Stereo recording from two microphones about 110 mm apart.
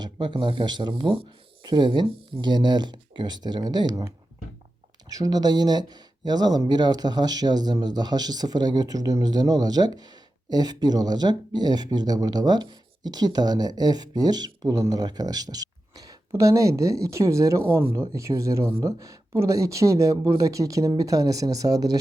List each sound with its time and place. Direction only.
0.0 s speech: 45° right (ahead or behind)
5.0 s speech: 35° right (ahead or behind)